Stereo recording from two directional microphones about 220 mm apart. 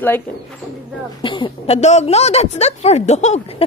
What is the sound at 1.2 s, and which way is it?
A woman's voice, 20° left (ahead or behind).